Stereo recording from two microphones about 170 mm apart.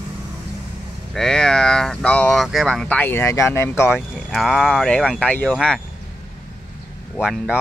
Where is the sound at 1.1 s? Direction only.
5° left (ahead or behind).